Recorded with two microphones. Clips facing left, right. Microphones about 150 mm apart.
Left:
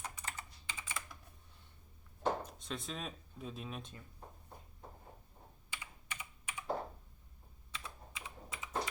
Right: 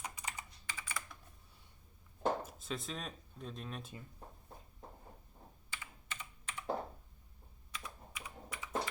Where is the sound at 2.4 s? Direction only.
5° right (ahead or behind).